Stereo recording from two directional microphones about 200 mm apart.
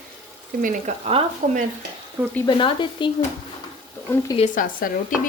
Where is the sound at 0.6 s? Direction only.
30° right (ahead or behind).